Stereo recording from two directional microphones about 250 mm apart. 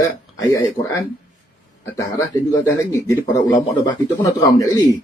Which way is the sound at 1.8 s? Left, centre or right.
Centre.